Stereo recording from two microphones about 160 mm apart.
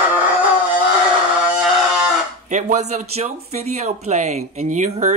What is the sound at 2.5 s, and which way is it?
Speech, 45° right (ahead or behind).